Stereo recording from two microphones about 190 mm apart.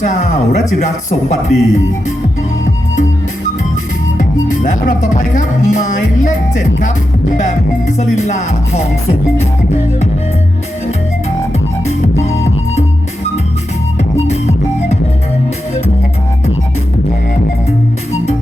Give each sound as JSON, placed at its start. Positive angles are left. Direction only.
{"t": 0.0, "sound": "speech", "side_deg": 40}
{"t": 4.2, "sound": "speech", "side_deg": 40}
{"t": 12.2, "sound": "music", "side_deg": 35}
{"t": 14.3, "sound": "music", "side_deg": 35}